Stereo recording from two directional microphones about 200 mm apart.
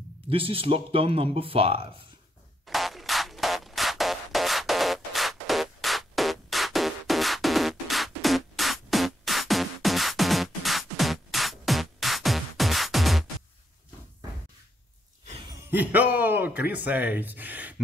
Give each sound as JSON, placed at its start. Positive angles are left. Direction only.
{"t": 0.3, "sound": "speech", "side_deg": -25}
{"t": 2.6, "sound": "music", "side_deg": 0}
{"t": 15.7, "sound": "speech", "side_deg": -10}